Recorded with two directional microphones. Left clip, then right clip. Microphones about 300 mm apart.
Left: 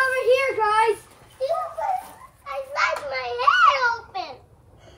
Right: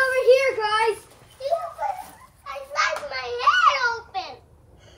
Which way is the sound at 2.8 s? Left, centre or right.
Left.